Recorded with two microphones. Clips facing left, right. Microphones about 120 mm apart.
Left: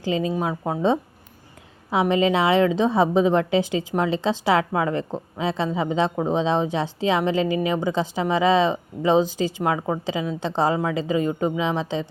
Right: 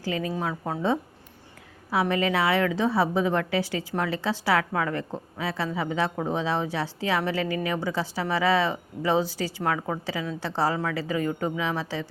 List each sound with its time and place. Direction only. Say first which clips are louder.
0.0 s a woman's voice: left 5 dB; 20° left (ahead or behind)